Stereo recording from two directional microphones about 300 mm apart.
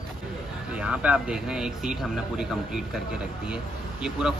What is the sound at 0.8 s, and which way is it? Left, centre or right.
Speech, centre.